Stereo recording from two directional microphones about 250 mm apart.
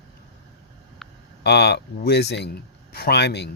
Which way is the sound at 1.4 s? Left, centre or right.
Left.